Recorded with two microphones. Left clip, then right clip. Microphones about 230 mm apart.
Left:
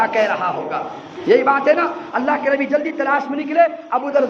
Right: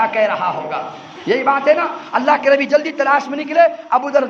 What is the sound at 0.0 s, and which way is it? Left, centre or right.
A man's voice, right.